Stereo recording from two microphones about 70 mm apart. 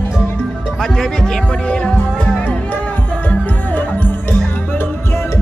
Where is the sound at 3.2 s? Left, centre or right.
Left.